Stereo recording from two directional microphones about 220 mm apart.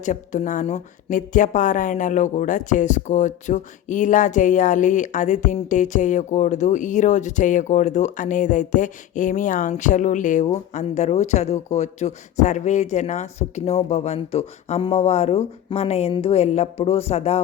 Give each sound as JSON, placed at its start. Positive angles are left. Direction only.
{"t": 0.0, "sound": "speech", "side_deg": 35}